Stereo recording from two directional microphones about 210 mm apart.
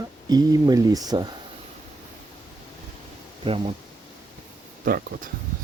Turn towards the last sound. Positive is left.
turn(degrees=-45)  # may be behind; listen again after turning